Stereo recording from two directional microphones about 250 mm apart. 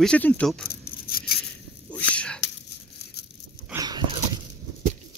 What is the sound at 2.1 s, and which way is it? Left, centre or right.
Whispering, centre.